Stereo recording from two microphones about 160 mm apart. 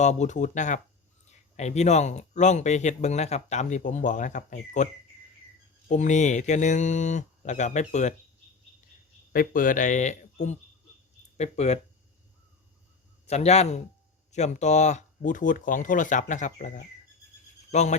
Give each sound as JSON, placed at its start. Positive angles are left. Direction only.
{"t": 0.0, "sound": "speech", "side_deg": 45}
{"t": 5.9, "sound": "speech", "side_deg": 50}
{"t": 9.3, "sound": "speech", "side_deg": 60}
{"t": 13.2, "sound": "a man's voice", "side_deg": 40}